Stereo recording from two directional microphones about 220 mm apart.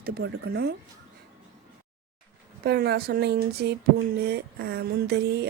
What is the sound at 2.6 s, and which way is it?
Speech, 45° right (ahead or behind).